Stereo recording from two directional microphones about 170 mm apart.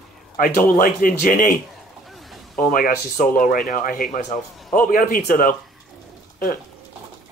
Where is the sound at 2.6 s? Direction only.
55° left (ahead or behind).